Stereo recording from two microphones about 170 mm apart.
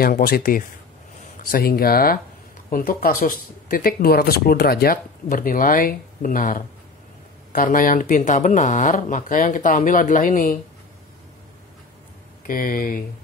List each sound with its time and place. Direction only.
0.0 s speech: 60° left (ahead or behind)
12.4 s speech: 55° left (ahead or behind)